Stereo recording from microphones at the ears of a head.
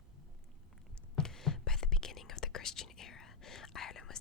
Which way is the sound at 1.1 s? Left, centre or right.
Left.